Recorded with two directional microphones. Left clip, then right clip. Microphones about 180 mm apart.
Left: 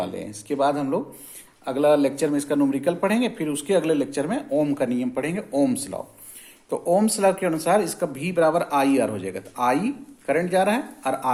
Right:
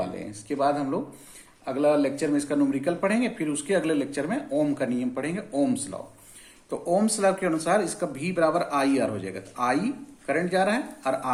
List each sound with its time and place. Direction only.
0.0 s speech: 35° left (ahead or behind)